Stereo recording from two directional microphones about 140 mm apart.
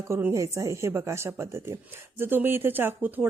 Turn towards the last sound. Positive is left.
turn(degrees=-15)  # may be behind; listen again after turning